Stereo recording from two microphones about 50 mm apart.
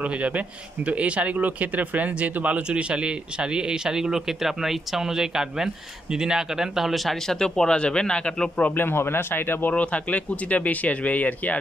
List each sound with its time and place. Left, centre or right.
0.0 s a man's voice: right; by 7.2 s centre
7.2 s speech: centre
8.7 s speech: left
9.7 s speech: left